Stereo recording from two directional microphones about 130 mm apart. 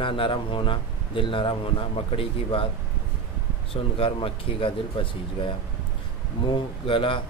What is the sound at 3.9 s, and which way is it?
Speech, 45° left (ahead or behind).